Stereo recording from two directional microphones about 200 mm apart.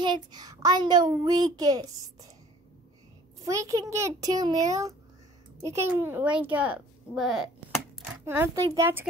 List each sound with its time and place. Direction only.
0.0 s a child's voice: 20° right (ahead or behind)
3.4 s a child's voice: 15° right (ahead or behind)